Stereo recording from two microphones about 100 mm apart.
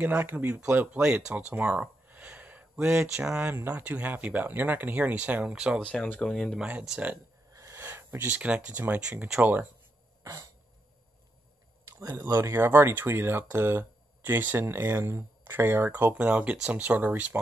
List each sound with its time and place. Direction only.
0.0 s speech: 20° right (ahead or behind)
5.8 s speech: 5° left (ahead or behind)
6.6 s speech: 5° right (ahead or behind)
7.5 s a sound: 25° right (ahead or behind)
8.6 s speech: 15° right (ahead or behind)
12.2 s speech: 25° right (ahead or behind)